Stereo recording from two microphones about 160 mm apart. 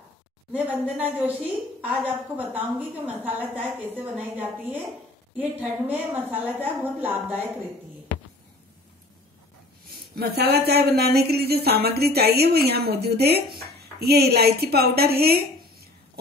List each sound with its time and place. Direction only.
0.5 s a woman's voice: 10° right (ahead or behind)
10.1 s speech: 80° right